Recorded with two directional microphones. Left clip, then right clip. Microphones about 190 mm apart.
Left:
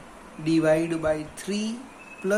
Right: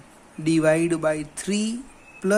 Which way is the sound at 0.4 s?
50° right (ahead or behind).